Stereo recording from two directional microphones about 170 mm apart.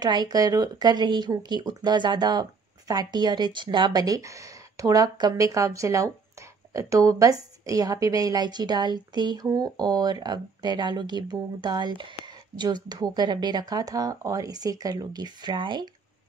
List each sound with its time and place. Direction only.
0.0 s a woman's voice: 25° right (ahead or behind)